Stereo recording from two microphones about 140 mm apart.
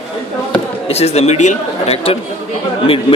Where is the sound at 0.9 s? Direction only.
45° left (ahead or behind).